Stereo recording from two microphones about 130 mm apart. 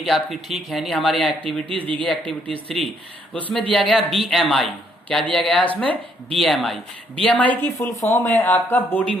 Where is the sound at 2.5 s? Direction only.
45° right (ahead or behind).